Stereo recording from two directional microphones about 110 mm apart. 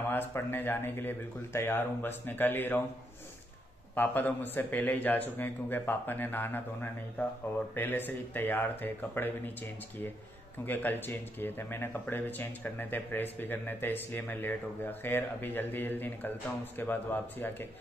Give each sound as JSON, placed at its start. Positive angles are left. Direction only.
{"t": 0.1, "sound": "speech", "side_deg": 20}
{"t": 3.9, "sound": "speech", "side_deg": 15}